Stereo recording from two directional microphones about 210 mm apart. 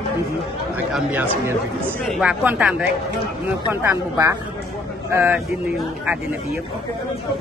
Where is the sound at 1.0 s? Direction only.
5° right (ahead or behind).